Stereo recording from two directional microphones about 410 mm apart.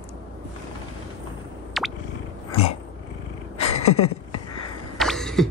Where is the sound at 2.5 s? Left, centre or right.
Centre.